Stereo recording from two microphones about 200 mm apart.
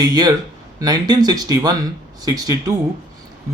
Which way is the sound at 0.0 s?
20° right (ahead or behind).